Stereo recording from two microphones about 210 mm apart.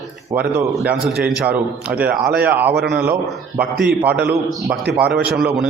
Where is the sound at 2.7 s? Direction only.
55° right (ahead or behind).